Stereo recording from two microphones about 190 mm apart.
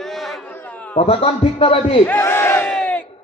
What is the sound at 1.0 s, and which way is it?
A man's voice, 30° left (ahead or behind).